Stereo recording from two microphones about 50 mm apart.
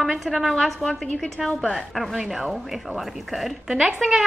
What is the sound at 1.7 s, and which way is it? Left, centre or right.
A woman's voice, centre.